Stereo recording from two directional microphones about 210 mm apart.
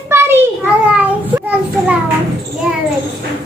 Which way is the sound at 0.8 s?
5° right (ahead or behind).